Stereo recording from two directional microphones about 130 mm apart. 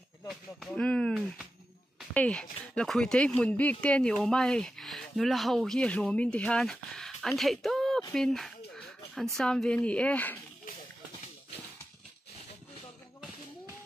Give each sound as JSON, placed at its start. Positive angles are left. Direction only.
{"t": 0.3, "sound": "speech", "side_deg": 0}